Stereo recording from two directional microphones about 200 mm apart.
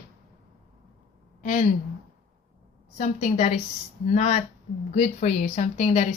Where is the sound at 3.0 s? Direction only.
35° left (ahead or behind).